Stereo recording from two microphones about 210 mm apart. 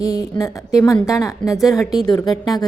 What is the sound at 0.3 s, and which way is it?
A woman's voice, 15° left (ahead or behind).